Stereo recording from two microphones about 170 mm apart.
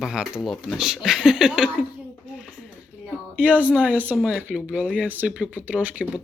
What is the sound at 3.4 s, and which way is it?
Speech, 10° right (ahead or behind).